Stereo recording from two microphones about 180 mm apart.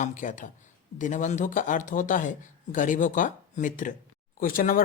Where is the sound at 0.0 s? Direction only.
45° left (ahead or behind).